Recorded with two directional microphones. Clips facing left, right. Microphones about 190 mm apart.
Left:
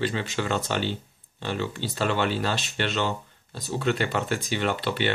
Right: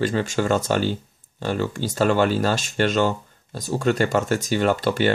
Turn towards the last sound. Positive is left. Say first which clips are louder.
# right 6 dB
turn(degrees=-45)  # may be behind; listen again after turning